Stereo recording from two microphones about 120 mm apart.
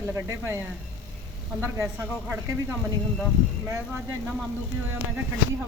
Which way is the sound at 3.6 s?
20° right (ahead or behind).